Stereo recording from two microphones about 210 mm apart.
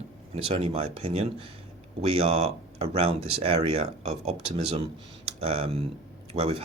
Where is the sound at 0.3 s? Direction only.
25° right (ahead or behind).